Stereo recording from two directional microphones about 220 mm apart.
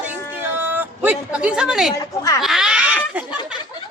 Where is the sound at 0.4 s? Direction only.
10° right (ahead or behind).